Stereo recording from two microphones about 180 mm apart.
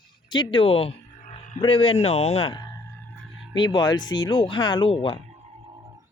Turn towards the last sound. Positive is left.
turn(degrees=30)  # may be behind; listen again after turning